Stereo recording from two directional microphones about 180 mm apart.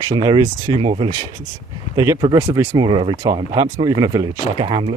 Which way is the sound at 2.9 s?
30° right (ahead or behind).